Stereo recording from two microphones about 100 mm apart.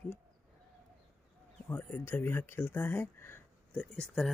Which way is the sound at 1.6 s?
20° left (ahead or behind).